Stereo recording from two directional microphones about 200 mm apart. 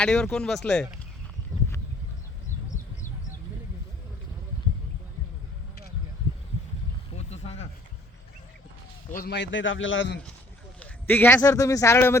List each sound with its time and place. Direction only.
0.0 s speech: 5° left (ahead or behind)
7.2 s a sound: 35° left (ahead or behind)
9.1 s a man's voice: 55° left (ahead or behind); by 10.2 s 70° left (ahead or behind)
10.8 s speech: 10° left (ahead or behind)